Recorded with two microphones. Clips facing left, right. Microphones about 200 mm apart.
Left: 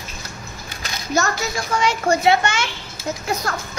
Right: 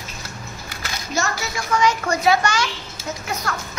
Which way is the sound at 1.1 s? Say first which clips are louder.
Left 4 dB; 30° left (ahead or behind).